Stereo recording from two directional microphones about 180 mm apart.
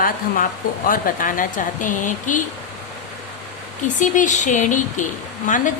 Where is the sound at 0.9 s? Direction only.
50° left (ahead or behind).